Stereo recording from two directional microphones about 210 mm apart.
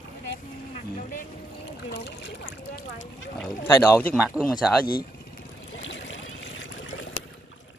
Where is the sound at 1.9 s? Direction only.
55° left (ahead or behind).